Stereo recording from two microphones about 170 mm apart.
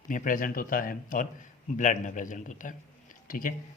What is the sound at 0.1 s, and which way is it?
A man's voice, 50° left (ahead or behind).